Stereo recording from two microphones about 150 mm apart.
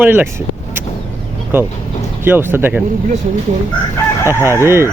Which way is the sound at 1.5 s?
15° right (ahead or behind).